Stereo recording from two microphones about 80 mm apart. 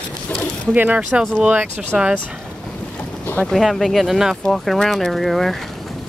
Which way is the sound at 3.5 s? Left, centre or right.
Centre.